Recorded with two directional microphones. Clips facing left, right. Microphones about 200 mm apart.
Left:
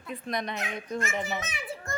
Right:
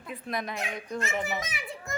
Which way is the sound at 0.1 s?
5° right (ahead or behind).